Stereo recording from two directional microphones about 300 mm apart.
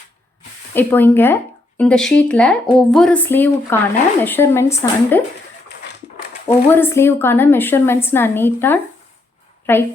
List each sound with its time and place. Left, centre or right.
0.7 s a woman's voice: centre
5.6 s a sound: left
6.7 s a woman's voice: centre